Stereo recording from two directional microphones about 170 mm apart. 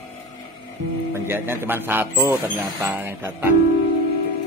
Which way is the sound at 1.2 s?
15° right (ahead or behind).